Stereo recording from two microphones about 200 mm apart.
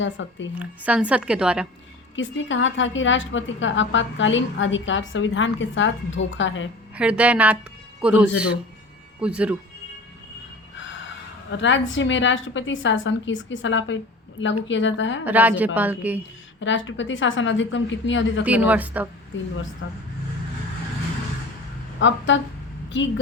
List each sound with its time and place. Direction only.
0.0 s a woman's voice: 65° left (ahead or behind)
0.6 s a woman's voice: 5° right (ahead or behind)
2.1 s a woman's voice: 70° left (ahead or behind)
6.9 s a woman's voice: 5° right (ahead or behind)
11.5 s a woman's voice: 70° left (ahead or behind)
15.2 s a woman's voice: 10° right (ahead or behind)
16.6 s a woman's voice: 70° left (ahead or behind)
18.4 s a woman's voice: 5° right (ahead or behind)
19.8 s speech: 80° left
21.9 s a woman's voice: 65° left (ahead or behind)